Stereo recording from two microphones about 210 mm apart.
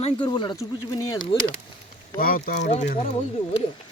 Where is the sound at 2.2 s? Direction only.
45° left (ahead or behind).